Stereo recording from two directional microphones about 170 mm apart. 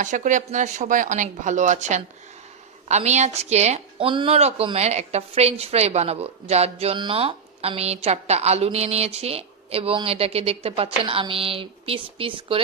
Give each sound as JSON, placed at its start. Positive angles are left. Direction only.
{"t": 0.0, "sound": "speech", "side_deg": -45}